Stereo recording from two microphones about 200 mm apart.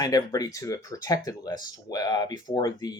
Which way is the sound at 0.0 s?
20° left (ahead or behind).